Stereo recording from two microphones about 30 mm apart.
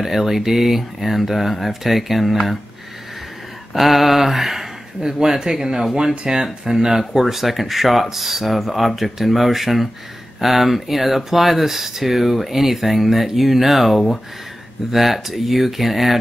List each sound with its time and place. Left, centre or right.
0.0 s speech: centre
3.7 s speech: centre
5.0 s speech: centre